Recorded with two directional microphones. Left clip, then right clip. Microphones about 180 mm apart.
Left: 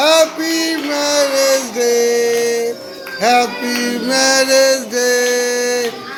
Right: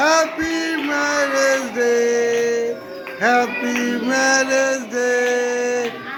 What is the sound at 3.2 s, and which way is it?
Music, centre (ahead or behind).